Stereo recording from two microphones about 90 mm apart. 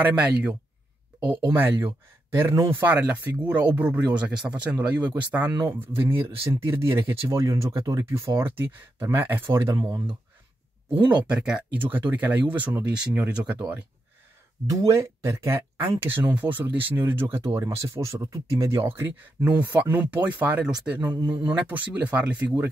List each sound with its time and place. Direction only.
0.0 s speech: 15° right (ahead or behind)
1.2 s speech: 60° right (ahead or behind)
1.5 s speech: 20° right (ahead or behind); by 10.0 s 40° right (ahead or behind)
10.9 s speech: 15° right (ahead or behind)
14.7 s speech: 40° right (ahead or behind); by 22.5 s 15° right (ahead or behind)